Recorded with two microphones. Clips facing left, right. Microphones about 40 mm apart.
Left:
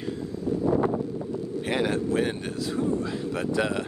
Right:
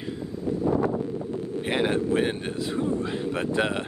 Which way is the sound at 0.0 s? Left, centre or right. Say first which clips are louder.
Left 1 dB; centre.